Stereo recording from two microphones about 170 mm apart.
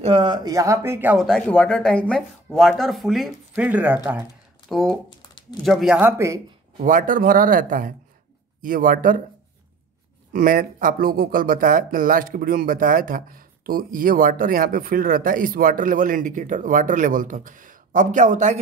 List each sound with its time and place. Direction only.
0.0 s speech: 30° right (ahead or behind); by 1.1 s 15° right (ahead or behind)
1.1 s speech: 5° left (ahead or behind)
4.6 s speech: centre (ahead or behind)
5.2 s a sound: 25° left (ahead or behind)
5.6 s speech: centre (ahead or behind)
5.9 s speech: 15° right (ahead or behind)
6.8 s speech: 50° right (ahead or behind)
10.3 s speech: 55° right (ahead or behind)